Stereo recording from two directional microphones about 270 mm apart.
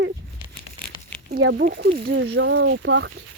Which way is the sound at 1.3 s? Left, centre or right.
Right.